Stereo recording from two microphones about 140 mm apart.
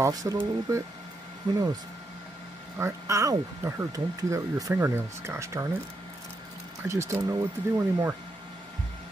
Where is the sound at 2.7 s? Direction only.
20° right (ahead or behind).